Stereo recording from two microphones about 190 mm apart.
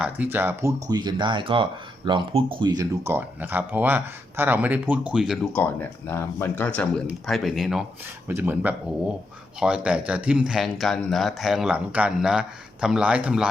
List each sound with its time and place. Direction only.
0.0 s speech: 10° right (ahead or behind)